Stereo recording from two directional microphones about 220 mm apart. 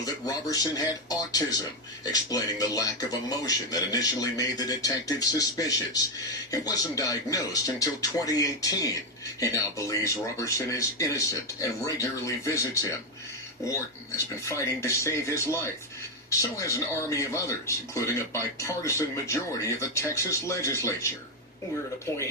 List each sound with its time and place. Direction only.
0.0 s speech: 15° left (ahead or behind)
14.4 s speech: 10° left (ahead or behind)